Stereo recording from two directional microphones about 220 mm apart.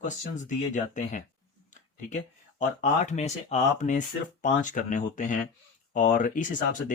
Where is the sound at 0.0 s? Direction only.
35° left (ahead or behind).